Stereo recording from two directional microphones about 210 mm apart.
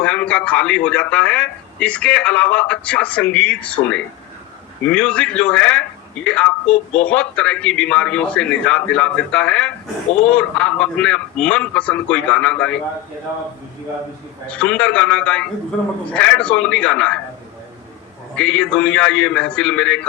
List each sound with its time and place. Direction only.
0.0 s a man's voice: 5° left (ahead or behind)
14.5 s a man's voice: 5° left (ahead or behind)
18.3 s a man's voice: 5° left (ahead or behind)